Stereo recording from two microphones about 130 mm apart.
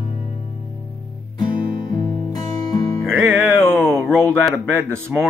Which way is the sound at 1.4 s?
30° left (ahead or behind).